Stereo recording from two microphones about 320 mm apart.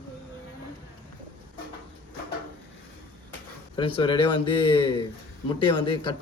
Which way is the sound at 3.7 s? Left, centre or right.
Centre.